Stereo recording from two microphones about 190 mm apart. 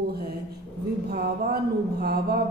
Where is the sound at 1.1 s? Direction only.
55° right (ahead or behind).